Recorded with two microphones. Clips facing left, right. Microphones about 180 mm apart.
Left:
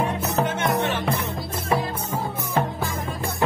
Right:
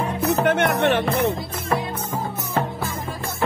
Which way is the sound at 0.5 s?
65° right (ahead or behind).